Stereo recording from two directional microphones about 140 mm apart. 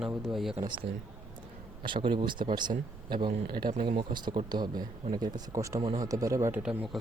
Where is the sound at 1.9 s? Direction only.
35° right (ahead or behind).